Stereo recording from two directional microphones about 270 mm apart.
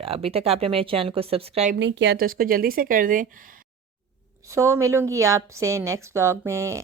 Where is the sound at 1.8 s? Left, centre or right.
Right.